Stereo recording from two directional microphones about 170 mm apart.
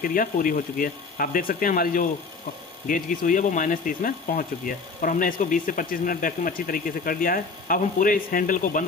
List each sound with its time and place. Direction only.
0.0 s speech: 55° left (ahead or behind)